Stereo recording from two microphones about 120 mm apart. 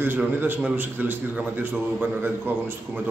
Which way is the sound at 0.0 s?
15° right (ahead or behind).